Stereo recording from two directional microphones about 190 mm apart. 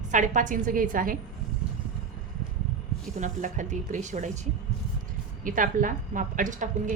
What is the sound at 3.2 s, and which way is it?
A woman's voice, 40° right (ahead or behind).